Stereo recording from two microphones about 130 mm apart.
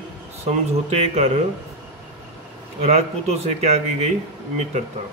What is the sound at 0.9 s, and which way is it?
Speech, 55° right (ahead or behind).